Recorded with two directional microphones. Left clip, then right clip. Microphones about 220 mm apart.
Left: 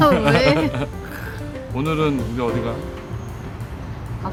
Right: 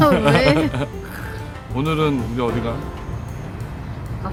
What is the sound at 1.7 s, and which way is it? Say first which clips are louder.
Speech: right 1 dB; 10° right (ahead or behind).